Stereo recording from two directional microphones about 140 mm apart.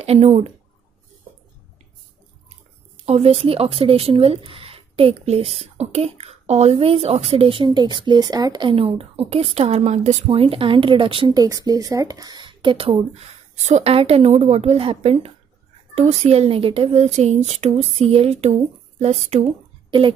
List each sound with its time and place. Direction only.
0.0 s speech: 50° right (ahead or behind)
3.0 s speech: 50° right (ahead or behind)
13.1 s speech: 55° right (ahead or behind)